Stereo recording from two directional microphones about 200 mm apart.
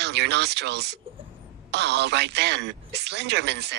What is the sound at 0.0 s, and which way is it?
Speech, 55° right (ahead or behind).